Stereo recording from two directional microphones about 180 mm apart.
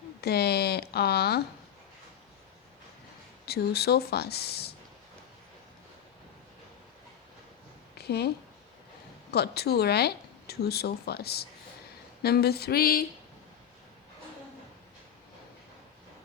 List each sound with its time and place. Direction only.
0.2 s speech: 60° left (ahead or behind)
3.4 s speech: 60° left (ahead or behind)
7.9 s a woman's voice: 65° left (ahead or behind)
9.3 s speech: 60° left (ahead or behind)